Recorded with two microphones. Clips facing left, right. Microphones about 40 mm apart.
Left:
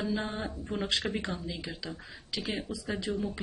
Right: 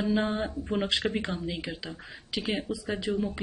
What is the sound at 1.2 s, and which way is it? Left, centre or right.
Speech, right.